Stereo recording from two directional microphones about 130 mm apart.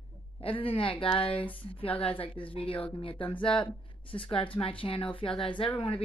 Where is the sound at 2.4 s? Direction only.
40° left (ahead or behind).